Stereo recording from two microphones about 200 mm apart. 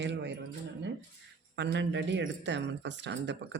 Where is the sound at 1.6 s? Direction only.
60° right (ahead or behind).